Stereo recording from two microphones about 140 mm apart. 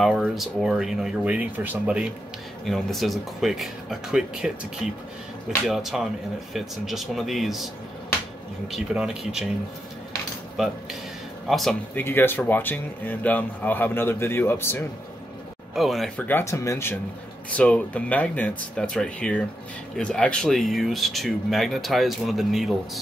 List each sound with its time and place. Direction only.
0.0 s speech: centre (ahead or behind)
5.7 s speech: 5° right (ahead or behind)
8.7 s speech: 5° right (ahead or behind)
10.6 s speech: 5° right (ahead or behind)
11.9 s speech: 15° left (ahead or behind)
15.7 s speech: centre (ahead or behind)
16.2 s speech: 15° left (ahead or behind); by 22.8 s centre (ahead or behind)